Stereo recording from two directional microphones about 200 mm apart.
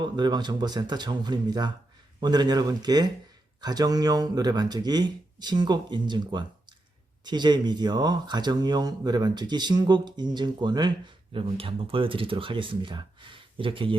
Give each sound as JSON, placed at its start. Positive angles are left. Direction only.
{"t": 0.0, "sound": "speech", "side_deg": -20}